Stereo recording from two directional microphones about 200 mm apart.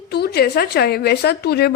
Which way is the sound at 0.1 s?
55° left (ahead or behind).